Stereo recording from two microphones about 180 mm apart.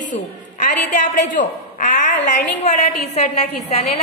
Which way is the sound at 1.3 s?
45° left (ahead or behind).